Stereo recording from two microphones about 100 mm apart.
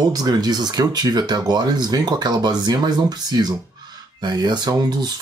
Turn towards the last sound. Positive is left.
turn(degrees=-45)  # may be behind; listen again after turning